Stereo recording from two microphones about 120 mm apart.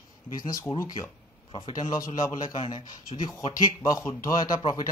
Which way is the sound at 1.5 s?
35° left (ahead or behind).